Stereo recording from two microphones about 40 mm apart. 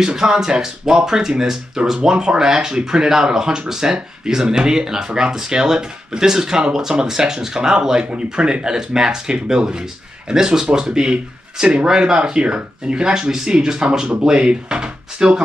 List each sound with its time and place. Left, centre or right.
0.0 s speech: centre